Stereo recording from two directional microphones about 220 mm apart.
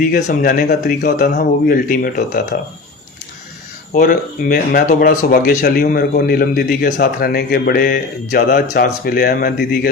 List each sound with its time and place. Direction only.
0.0 s speech: 40° left (ahead or behind)
3.9 s speech: 40° left (ahead or behind)